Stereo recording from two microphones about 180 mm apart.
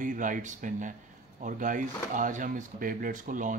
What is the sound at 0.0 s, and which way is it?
Speech, 45° right (ahead or behind).